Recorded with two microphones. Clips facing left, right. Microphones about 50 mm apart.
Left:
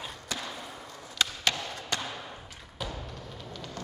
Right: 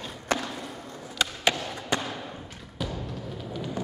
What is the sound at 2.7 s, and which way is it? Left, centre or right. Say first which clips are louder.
Music: right 4 dB; centre.